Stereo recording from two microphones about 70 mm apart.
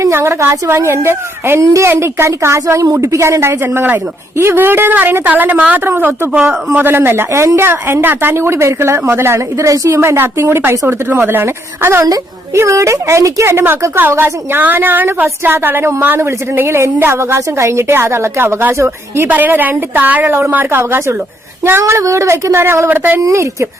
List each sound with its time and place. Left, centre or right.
0.0 s a woman's voice: right
6.3 s a woman's voice: right
10.0 s a woman's voice: right
19.3 s a woman's voice: right
23.2 s a woman's voice: right